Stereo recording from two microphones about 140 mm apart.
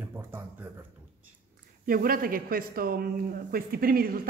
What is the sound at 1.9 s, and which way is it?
Speech, 90° right.